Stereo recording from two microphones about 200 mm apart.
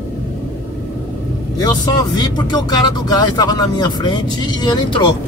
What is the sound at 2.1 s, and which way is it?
Speech, 20° left (ahead or behind).